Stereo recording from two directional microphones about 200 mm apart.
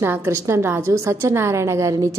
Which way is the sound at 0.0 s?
10° right (ahead or behind).